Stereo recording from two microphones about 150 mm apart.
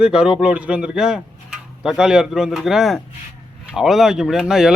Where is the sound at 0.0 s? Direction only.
5° right (ahead or behind).